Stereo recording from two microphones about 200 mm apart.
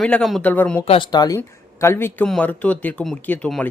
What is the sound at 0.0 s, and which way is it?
Speech, 5° left (ahead or behind).